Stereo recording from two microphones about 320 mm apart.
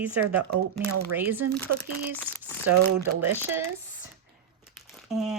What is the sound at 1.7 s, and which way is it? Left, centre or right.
Speech, right.